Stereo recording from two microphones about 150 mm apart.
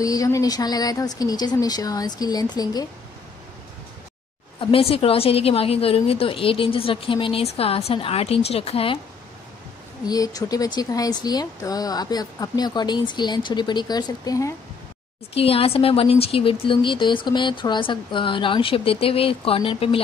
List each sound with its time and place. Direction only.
0.0 s speech: 25° left (ahead or behind)
4.6 s speech: 35° left (ahead or behind)
10.0 s speech: 25° left (ahead or behind)
15.3 s speech: 40° left (ahead or behind)